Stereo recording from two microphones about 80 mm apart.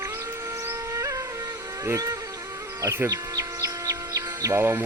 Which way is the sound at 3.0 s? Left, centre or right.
Right.